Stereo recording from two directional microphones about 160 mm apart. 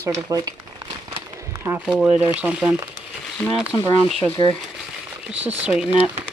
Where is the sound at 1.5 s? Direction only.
15° right (ahead or behind).